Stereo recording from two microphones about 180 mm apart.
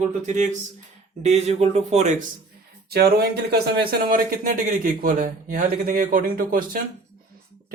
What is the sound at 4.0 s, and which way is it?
A man's voice, 50° right (ahead or behind).